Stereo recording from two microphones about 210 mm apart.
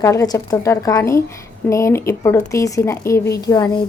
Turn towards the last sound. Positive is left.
turn(degrees=20)  # may be behind; listen again after turning